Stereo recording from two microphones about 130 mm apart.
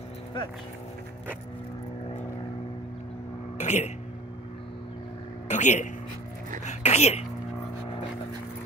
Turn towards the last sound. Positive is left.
turn(degrees=55)  # may be behind; listen again after turning